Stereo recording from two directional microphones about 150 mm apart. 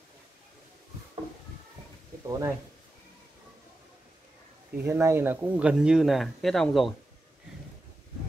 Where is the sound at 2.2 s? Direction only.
20° right (ahead or behind).